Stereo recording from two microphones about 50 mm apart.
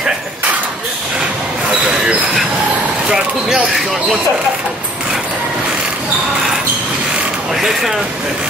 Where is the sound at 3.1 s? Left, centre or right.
Centre.